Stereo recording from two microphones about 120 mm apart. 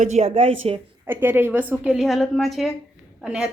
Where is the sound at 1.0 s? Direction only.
15° right (ahead or behind).